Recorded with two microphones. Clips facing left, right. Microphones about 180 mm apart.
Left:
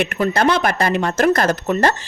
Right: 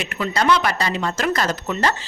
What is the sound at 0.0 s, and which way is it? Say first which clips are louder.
Speech: left 5 dB; 55° left (ahead or behind).